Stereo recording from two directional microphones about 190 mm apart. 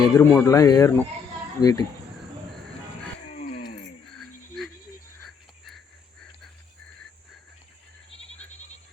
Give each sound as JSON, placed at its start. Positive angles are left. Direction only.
{"t": 0.0, "sound": "speech", "side_deg": 15}
{"t": 4.2, "sound": "insect", "side_deg": 0}
{"t": 5.2, "sound": "a sound", "side_deg": 0}
{"t": 8.1, "sound": "bleat", "side_deg": 30}